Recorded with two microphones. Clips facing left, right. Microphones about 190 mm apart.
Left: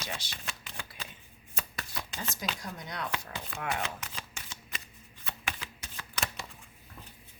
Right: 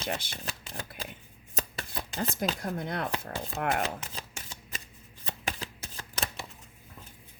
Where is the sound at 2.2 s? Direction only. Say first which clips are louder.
Right 8 dB; 40° right (ahead or behind).